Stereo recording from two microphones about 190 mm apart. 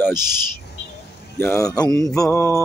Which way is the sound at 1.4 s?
15° left (ahead or behind).